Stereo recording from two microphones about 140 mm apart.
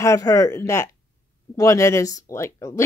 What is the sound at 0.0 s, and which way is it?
A woman's voice, 25° left (ahead or behind).